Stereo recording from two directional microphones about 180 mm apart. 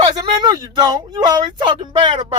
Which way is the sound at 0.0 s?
25° right (ahead or behind).